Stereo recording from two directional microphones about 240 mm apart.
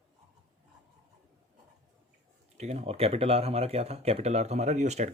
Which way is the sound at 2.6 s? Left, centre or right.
Right.